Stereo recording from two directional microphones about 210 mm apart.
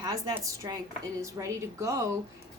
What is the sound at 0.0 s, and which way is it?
A woman's voice, 15° right (ahead or behind).